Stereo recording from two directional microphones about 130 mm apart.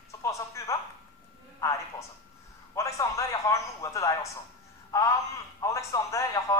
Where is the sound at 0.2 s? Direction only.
25° left (ahead or behind).